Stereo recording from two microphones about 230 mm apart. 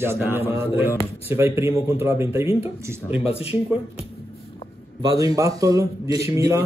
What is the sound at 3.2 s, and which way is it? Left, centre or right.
Speech, left.